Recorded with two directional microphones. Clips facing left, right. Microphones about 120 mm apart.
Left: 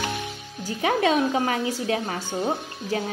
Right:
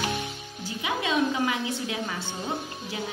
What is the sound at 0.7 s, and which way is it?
A woman's voice, 50° left (ahead or behind).